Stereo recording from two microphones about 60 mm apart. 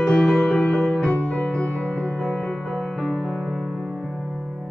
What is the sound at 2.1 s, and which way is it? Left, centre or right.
Music, centre.